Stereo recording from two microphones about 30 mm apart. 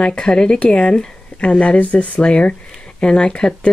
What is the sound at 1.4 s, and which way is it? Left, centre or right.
Speech, left.